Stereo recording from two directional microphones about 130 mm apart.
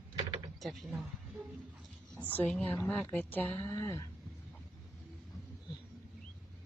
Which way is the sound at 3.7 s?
20° left (ahead or behind).